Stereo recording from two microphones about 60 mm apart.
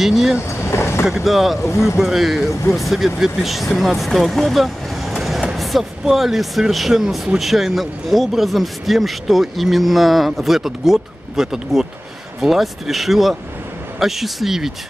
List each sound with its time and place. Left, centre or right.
0.0 s speech: centre
0.5 s vehicle: left
1.0 s speech: centre